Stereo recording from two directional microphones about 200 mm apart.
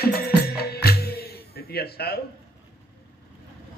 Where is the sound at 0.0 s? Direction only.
50° left (ahead or behind).